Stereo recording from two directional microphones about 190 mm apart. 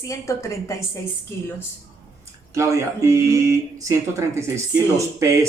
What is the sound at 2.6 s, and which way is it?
Speech, 15° right (ahead or behind).